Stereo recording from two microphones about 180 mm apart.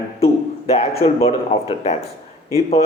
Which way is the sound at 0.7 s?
35° left (ahead or behind).